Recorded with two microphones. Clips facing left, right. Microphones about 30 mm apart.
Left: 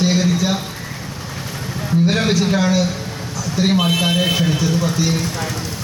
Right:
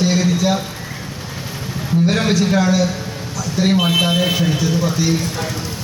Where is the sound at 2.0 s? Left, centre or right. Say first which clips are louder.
Right 1 dB; centre.